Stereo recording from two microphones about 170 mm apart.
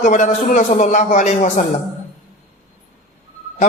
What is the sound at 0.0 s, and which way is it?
A man's voice, 50° left (ahead or behind).